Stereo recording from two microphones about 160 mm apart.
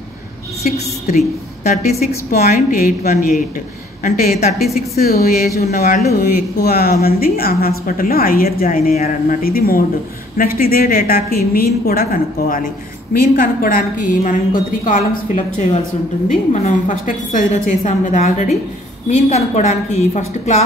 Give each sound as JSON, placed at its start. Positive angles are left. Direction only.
{"t": 0.7, "sound": "a woman's voice", "side_deg": 45}
{"t": 2.3, "sound": "a woman's voice", "side_deg": 70}